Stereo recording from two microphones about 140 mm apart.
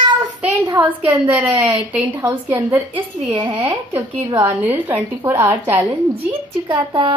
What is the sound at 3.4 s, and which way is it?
Speech, 35° right (ahead or behind).